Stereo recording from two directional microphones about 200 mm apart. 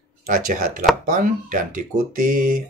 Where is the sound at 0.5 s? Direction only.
45° right (ahead or behind).